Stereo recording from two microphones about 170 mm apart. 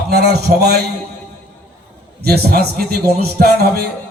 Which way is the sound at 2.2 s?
65° right (ahead or behind).